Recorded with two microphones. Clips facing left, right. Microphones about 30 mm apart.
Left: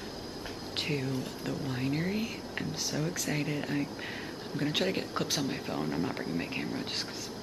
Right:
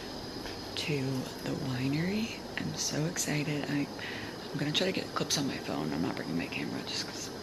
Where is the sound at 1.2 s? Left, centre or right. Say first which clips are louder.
Even; centre.